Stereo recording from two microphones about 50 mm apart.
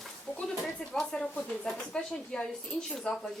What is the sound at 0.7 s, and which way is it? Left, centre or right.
Speech, centre.